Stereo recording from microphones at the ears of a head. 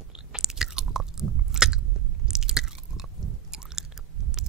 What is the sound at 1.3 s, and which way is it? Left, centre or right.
Biting, right.